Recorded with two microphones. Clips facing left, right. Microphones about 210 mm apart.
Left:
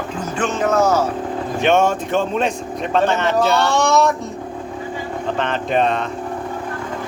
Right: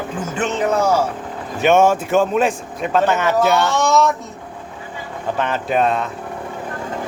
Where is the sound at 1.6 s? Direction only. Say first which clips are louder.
Right 3 dB; 5° right (ahead or behind).